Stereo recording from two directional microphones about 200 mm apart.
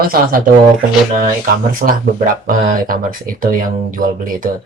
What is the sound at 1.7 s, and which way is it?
Speech, 45° right (ahead or behind).